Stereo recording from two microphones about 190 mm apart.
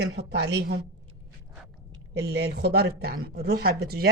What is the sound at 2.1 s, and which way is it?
Speech, 60° right (ahead or behind).